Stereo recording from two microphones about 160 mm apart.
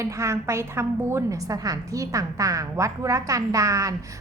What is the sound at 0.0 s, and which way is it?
A woman's voice, 20° right (ahead or behind).